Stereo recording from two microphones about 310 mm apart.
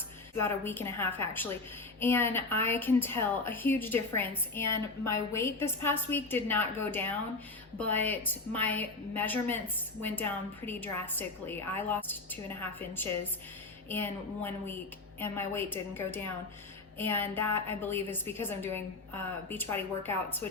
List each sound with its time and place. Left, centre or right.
0.4 s a woman's voice: centre